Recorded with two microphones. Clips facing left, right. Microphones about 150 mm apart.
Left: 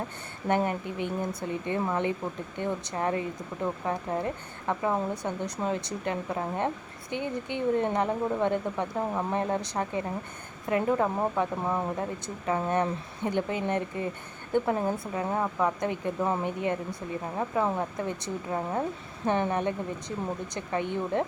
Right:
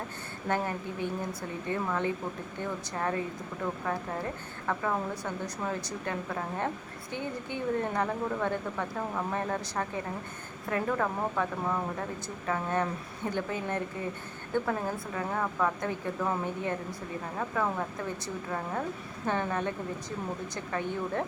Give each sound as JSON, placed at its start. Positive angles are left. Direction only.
{"t": 0.4, "sound": "speech", "side_deg": 20}
{"t": 19.2, "sound": "speech", "side_deg": 20}